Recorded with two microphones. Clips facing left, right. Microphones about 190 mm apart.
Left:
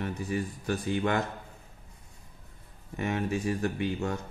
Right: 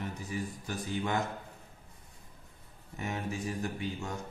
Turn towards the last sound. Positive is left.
turn(degrees=65)  # may be behind; listen again after turning